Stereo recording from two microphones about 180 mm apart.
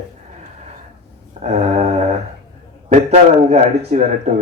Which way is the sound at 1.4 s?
40° right (ahead or behind).